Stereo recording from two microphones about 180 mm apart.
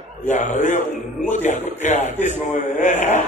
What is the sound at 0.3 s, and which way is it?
A man's voice, 40° left (ahead or behind).